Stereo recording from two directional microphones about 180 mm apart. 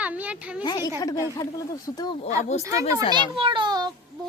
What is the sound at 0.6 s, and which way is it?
Speech, 25° left (ahead or behind).